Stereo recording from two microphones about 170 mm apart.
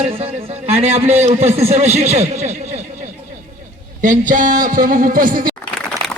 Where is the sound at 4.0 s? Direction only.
50° right (ahead or behind).